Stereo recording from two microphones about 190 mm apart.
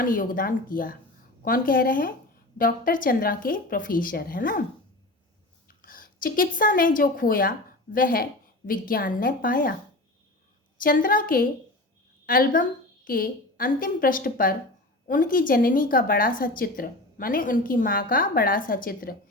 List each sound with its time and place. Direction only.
0.0 s a woman's voice: 45° left (ahead or behind)
5.6 s speech: 50° left (ahead or behind)
10.8 s a woman's voice: 50° left (ahead or behind)